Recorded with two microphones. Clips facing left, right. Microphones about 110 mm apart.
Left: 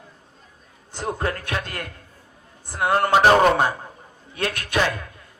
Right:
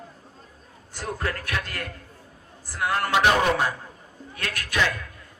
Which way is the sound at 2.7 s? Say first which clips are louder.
Left 5 dB; 25° left (ahead or behind).